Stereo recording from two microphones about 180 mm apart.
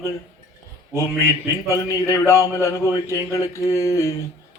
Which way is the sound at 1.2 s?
15° left (ahead or behind).